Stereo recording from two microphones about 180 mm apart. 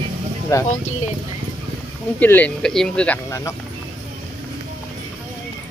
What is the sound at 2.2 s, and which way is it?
Speech, 10° left (ahead or behind).